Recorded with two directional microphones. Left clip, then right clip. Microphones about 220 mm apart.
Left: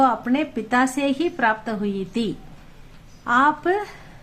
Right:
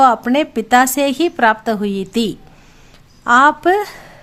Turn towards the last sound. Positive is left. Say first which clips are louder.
# right 7 dB
turn(degrees=-45)  # may be behind; listen again after turning